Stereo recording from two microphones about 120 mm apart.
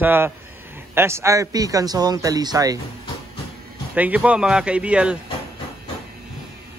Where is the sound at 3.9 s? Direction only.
15° right (ahead or behind).